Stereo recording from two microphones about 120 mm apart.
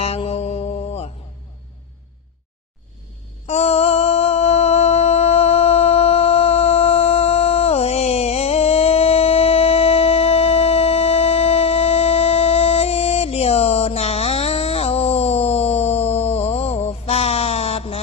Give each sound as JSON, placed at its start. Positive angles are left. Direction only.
{"t": 0.0, "sound": "mantra", "side_deg": 60}
{"t": 3.4, "sound": "music", "side_deg": 60}